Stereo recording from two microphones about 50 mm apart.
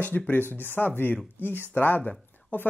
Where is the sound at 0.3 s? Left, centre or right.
Left.